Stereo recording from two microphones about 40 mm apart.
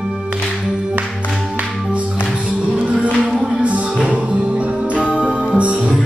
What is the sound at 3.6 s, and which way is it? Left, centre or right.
Music, right.